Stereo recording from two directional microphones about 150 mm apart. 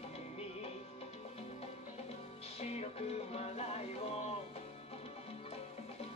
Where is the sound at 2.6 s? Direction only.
45° left (ahead or behind).